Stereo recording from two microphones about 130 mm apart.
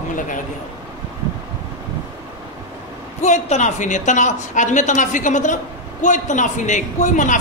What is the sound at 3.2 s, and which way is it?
A woman's voice, 65° left (ahead or behind).